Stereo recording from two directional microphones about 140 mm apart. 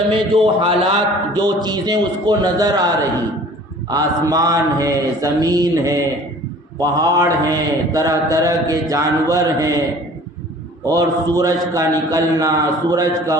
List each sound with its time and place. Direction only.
0.1 s speech: 40° right (ahead or behind)
1.3 s mantra: 30° right (ahead or behind)
10.8 s mantra: 25° right (ahead or behind)